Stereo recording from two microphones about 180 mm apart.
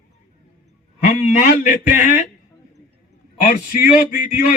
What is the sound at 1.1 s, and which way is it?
A man's voice, 50° left (ahead or behind).